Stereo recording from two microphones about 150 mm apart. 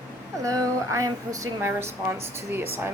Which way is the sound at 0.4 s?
20° right (ahead or behind).